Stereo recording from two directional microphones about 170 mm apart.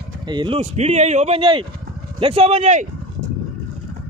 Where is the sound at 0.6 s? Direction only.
40° right (ahead or behind).